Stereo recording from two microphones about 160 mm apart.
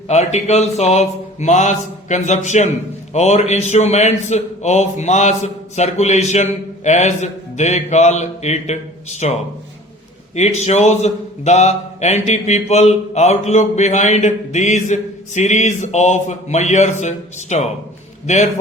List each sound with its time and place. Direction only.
0.1 s a man's voice: 45° left (ahead or behind)
10.3 s a man's voice: 45° left (ahead or behind)